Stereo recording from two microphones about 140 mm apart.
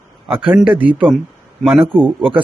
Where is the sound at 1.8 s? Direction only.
35° right (ahead or behind).